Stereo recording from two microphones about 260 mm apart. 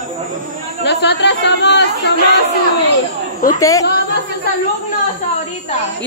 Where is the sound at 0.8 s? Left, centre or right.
Left.